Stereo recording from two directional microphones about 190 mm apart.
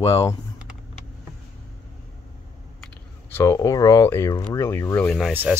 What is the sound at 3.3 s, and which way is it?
Speech, 15° left (ahead or behind).